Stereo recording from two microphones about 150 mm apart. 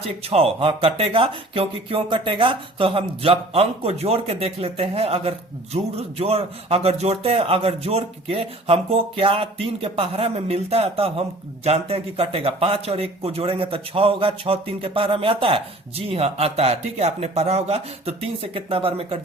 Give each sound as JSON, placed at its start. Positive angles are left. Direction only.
{"t": 0.0, "sound": "speech", "side_deg": -40}